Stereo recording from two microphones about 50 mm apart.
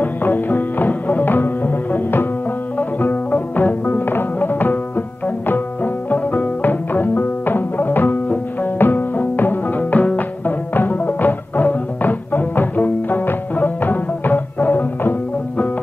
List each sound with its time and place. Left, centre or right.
0.0 s music: left
6.0 s music: left